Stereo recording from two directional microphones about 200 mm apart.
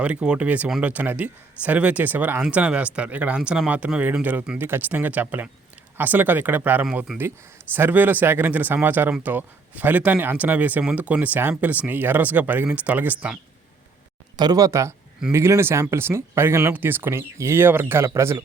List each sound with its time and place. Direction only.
0.0 s speech: 5° right (ahead or behind)
14.3 s speech: 20° right (ahead or behind)